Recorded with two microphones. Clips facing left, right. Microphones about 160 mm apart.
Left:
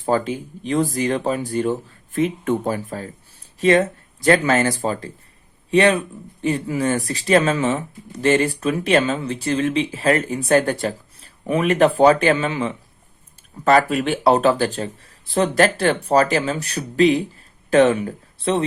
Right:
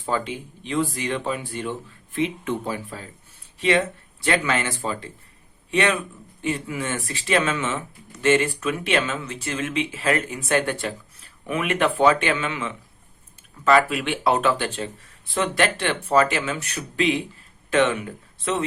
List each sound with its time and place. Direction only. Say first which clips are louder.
0.0 s speech: left 6 dB; 40° left (ahead or behind)